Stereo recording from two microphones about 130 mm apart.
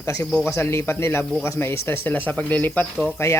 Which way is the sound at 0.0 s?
20° left (ahead or behind).